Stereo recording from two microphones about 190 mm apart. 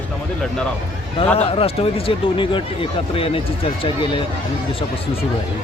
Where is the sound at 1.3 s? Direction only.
30° left (ahead or behind).